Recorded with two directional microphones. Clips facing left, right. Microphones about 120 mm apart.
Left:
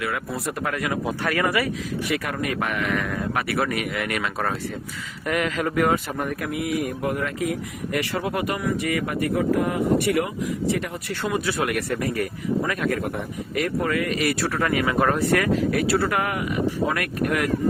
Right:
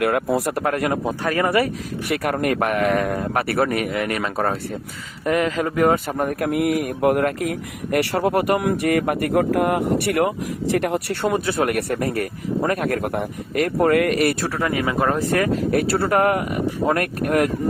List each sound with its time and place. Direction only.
0.3 s speech: 90° right
0.6 s speech: 45° right (ahead or behind)
2.3 s speech: 50° right (ahead or behind)
10.8 s speech: 65° right (ahead or behind)
11.3 s speech: 45° right (ahead or behind)
14.6 s speech: 25° right (ahead or behind); by 17.5 s 50° right (ahead or behind)